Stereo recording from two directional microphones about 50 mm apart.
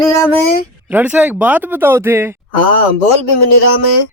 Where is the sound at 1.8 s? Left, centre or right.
Right.